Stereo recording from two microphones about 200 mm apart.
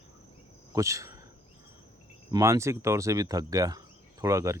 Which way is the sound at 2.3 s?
15° right (ahead or behind).